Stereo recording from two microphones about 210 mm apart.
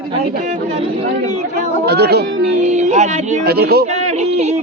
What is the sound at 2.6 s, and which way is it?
Speech, 30° right (ahead or behind).